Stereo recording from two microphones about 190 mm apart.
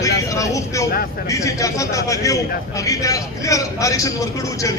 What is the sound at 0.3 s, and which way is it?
A man's voice, 15° left (ahead or behind).